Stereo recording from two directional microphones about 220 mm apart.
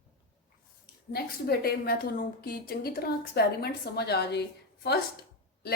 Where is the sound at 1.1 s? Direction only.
45° left (ahead or behind).